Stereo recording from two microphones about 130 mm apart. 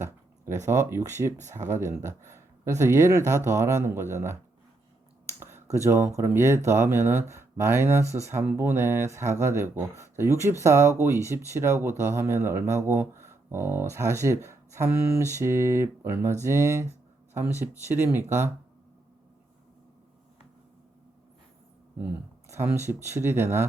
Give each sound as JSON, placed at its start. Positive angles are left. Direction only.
{"t": 0.0, "sound": "speech", "side_deg": -20}
{"t": 5.4, "sound": "a sound", "side_deg": -15}
{"t": 5.7, "sound": "speech", "side_deg": -20}
{"t": 17.9, "sound": "speech", "side_deg": -15}
{"t": 22.4, "sound": "speech", "side_deg": -20}